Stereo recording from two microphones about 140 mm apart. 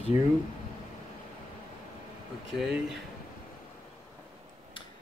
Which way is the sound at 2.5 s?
5° right (ahead or behind).